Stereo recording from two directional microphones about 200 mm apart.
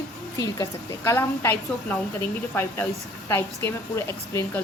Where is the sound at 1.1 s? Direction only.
10° left (ahead or behind).